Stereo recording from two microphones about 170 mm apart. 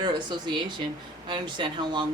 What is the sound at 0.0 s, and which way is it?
Speech, 25° right (ahead or behind).